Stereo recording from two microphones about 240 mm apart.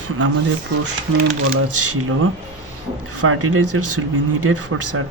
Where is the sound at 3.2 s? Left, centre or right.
Right.